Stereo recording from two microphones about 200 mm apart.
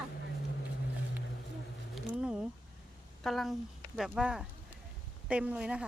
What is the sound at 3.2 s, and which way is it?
Speech, centre (ahead or behind).